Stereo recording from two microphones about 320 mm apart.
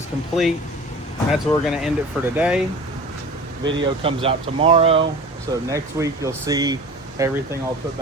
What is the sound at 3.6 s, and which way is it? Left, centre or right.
Speech, centre.